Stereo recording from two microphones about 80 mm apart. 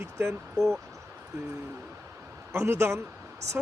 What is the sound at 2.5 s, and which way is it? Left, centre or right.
Speech, right.